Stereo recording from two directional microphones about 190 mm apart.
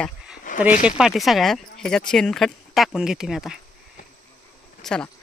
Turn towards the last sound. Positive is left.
turn(degrees=5)  # may be behind; listen again after turning